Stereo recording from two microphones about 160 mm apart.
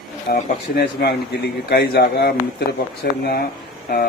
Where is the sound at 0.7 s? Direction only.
85° left.